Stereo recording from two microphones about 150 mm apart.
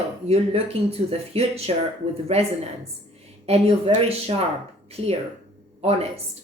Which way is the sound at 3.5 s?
40° right (ahead or behind).